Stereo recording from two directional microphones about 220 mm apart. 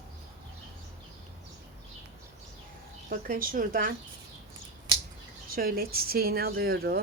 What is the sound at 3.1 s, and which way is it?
Speech, 40° right (ahead or behind).